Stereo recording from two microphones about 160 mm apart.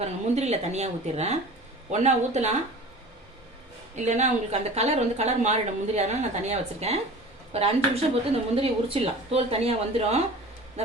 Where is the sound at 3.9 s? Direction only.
45° right (ahead or behind).